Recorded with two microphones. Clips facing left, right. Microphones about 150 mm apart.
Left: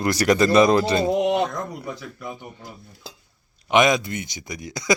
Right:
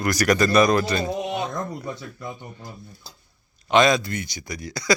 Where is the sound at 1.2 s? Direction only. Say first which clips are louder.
Left 7 dB; 60° left (ahead or behind).